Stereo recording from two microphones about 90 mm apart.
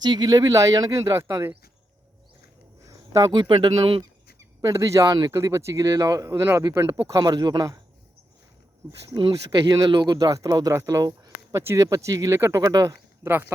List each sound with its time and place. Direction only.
0.0 s speech: 50° right (ahead or behind)
1.1 s speech: 30° right (ahead or behind)
2.8 s a sound: 40° right (ahead or behind)
3.4 s speech: 65° right (ahead or behind)
4.4 s speech: 35° right (ahead or behind)
8.8 s speech: 20° right (ahead or behind)
9.5 s speech: 65° right (ahead or behind)
9.7 s speech: 45° right (ahead or behind)
11.5 s speech: 30° right (ahead or behind)